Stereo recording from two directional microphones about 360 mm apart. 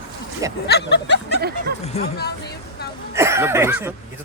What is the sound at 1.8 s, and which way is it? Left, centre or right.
Speech, left.